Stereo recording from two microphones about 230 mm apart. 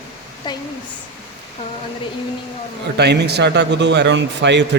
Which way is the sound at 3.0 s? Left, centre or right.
Right.